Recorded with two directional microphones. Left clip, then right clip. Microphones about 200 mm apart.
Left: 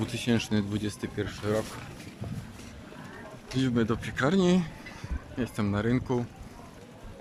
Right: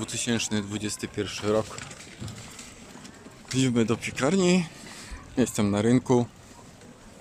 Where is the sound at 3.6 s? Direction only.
5° right (ahead or behind).